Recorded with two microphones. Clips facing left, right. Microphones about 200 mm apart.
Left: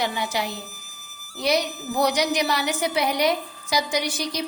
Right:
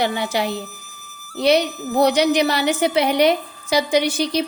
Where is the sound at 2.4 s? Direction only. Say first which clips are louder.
Right 6 dB; 30° right (ahead or behind).